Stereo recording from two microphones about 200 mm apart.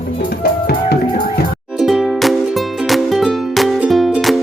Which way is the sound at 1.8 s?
Centre (ahead or behind).